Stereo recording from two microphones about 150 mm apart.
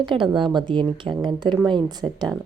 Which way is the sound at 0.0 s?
35° right (ahead or behind).